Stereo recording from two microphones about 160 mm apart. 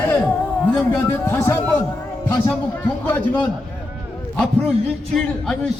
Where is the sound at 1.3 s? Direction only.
15° left (ahead or behind).